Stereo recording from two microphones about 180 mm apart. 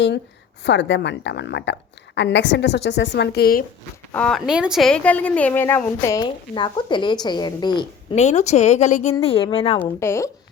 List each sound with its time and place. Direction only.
0.6 s a woman's voice: 75° left (ahead or behind); by 3.6 s 60° left (ahead or behind)
4.1 s a woman's voice: 5° left (ahead or behind); by 7.9 s 25° left (ahead or behind)
8.1 s speech: 40° left (ahead or behind)
9.2 s speech: 30° left (ahead or behind)
10.0 s a woman's voice: 15° left (ahead or behind)